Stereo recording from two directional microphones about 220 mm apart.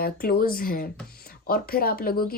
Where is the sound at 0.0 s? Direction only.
40° left (ahead or behind).